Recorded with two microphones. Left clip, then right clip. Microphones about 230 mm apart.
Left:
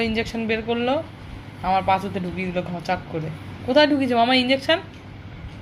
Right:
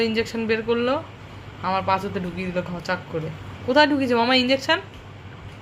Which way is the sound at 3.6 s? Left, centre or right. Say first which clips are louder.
Even; centre.